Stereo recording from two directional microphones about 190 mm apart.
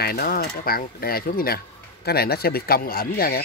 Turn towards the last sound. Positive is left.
turn(degrees=50)  # may be behind; listen again after turning